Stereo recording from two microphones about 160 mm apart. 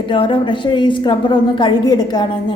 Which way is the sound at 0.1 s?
30° left (ahead or behind).